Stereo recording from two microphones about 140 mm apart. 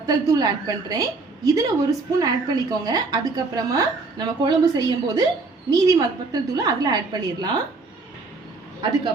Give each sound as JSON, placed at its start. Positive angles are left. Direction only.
{"t": 0.0, "sound": "a woman's voice", "side_deg": -25}